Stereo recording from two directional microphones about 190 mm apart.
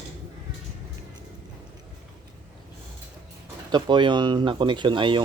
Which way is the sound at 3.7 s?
25° right (ahead or behind).